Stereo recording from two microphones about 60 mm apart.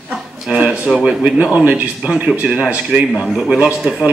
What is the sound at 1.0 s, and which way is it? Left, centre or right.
A man's voice, centre.